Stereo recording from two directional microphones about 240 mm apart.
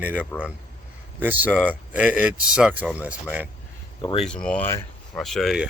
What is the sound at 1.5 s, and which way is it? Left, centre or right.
Speech, centre.